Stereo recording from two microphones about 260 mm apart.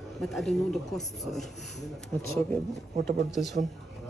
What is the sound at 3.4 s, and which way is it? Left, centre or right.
Speech, centre.